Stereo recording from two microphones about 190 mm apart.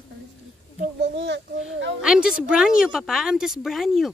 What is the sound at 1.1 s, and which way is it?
Speech, 70° right (ahead or behind).